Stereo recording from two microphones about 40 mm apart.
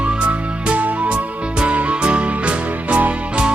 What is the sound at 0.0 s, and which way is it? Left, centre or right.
Music, right.